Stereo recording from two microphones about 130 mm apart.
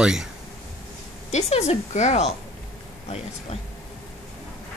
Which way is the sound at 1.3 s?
55° left (ahead or behind).